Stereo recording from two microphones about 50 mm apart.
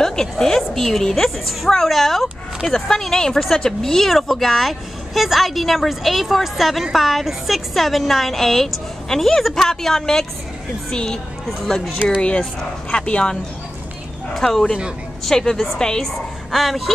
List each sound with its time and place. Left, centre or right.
0.0 s a woman's voice: centre
12.9 s a woman's voice: centre
14.3 s a woman's voice: centre
16.5 s a woman's voice: centre